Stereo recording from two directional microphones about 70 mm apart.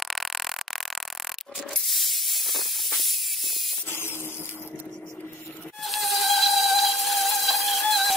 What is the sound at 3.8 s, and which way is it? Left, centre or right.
Vehicle, left.